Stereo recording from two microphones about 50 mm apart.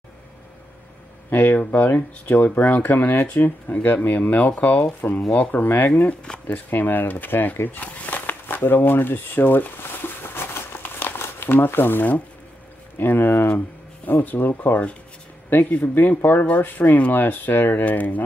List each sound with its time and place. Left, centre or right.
1.3 s speech: left